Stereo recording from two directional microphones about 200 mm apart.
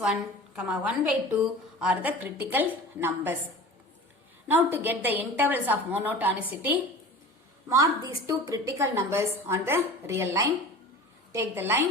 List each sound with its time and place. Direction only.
0.0 s a woman's voice: 5° right (ahead or behind)
4.4 s a woman's voice: 10° right (ahead or behind)